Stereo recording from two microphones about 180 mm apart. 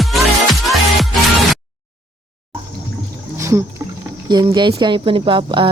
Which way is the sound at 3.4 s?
15° right (ahead or behind).